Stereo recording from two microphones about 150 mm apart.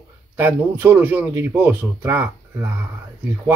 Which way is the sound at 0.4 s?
15° right (ahead or behind).